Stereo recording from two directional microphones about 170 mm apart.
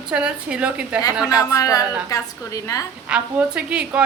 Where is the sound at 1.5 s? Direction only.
20° left (ahead or behind).